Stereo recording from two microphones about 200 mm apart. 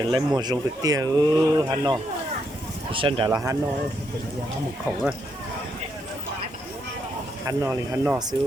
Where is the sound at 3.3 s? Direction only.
15° right (ahead or behind).